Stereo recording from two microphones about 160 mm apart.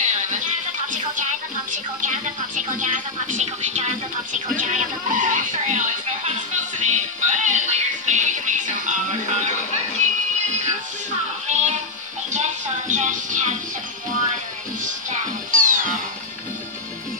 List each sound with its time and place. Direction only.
0.0 s music: 50° right (ahead or behind)
1.7 s a woman's voice: 50° right (ahead or behind)
4.6 s music: 50° right (ahead or behind)
10.6 s music: 50° right (ahead or behind)
14.8 s music: 55° right (ahead or behind)